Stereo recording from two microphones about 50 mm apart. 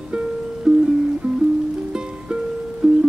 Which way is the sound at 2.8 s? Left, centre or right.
Centre.